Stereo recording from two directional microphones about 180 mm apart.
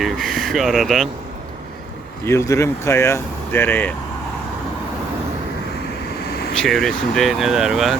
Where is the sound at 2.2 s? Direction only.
15° left (ahead or behind).